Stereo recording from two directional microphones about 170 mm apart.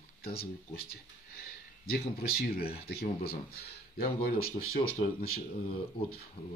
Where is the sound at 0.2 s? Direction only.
65° left (ahead or behind).